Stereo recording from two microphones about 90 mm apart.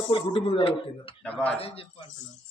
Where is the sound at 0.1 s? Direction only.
80° left.